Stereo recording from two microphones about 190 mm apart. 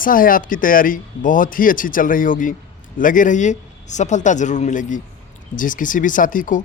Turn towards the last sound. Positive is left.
turn(degrees=45)  # may be behind; listen again after turning